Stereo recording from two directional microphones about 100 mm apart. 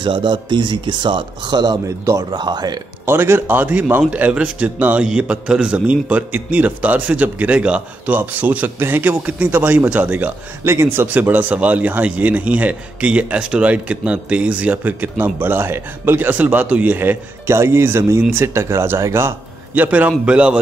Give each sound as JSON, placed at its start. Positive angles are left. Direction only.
{"t": 0.0, "sound": "speech", "side_deg": -50}
{"t": 1.9, "sound": "a man's voice", "side_deg": -35}
{"t": 2.3, "sound": "speech", "side_deg": -45}
{"t": 3.1, "sound": "a man's voice", "side_deg": -25}